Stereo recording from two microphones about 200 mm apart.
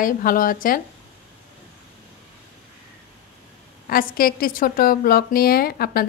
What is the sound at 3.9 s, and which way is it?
A woman's voice, 45° left (ahead or behind).